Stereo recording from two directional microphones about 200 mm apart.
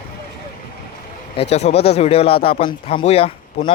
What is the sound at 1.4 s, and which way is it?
Speech, 35° left (ahead or behind).